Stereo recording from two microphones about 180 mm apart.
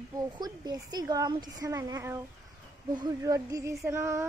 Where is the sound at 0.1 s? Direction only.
20° right (ahead or behind).